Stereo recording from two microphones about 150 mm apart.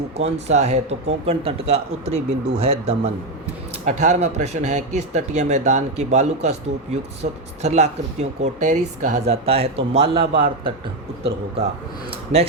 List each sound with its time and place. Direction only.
0.2 s a man's voice: 45° right (ahead or behind)